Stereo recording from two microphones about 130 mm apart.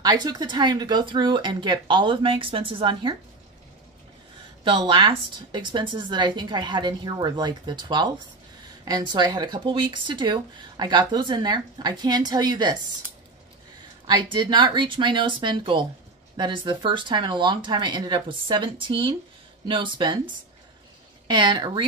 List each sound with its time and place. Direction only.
0.0 s speech: 30° right (ahead or behind)
4.6 s speech: 40° right (ahead or behind)
14.0 s speech: 35° right (ahead or behind)
21.3 s speech: 35° right (ahead or behind)